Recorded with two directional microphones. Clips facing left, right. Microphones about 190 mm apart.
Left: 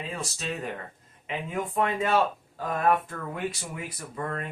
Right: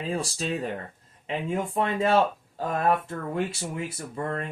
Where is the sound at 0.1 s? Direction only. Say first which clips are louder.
Right 5 dB; 35° right (ahead or behind).